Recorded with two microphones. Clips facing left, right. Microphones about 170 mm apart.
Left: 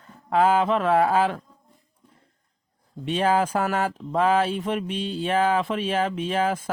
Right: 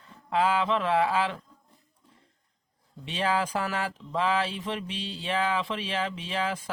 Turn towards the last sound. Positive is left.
turn(degrees=50)  # may be behind; listen again after turning